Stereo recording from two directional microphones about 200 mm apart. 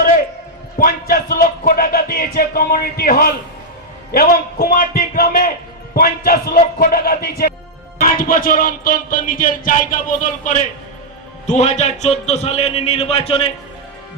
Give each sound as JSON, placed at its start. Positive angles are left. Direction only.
{"t": 0.8, "sound": "music", "side_deg": 45}
{"t": 11.4, "sound": "a man's voice", "side_deg": 35}